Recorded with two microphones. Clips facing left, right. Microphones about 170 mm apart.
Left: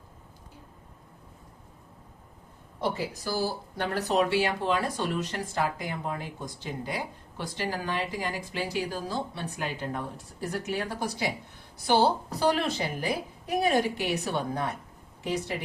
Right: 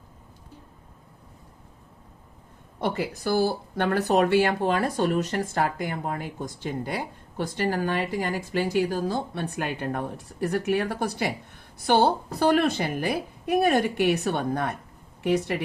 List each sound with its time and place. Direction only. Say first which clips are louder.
2.8 s a woman's voice: right 4 dB; 65° right (ahead or behind)